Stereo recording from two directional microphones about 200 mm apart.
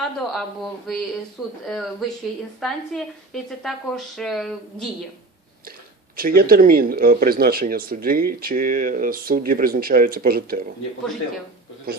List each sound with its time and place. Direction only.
0.3 s a woman's voice: centre (ahead or behind)
6.1 s speech: 45° right (ahead or behind)
11.9 s speech: 50° right (ahead or behind)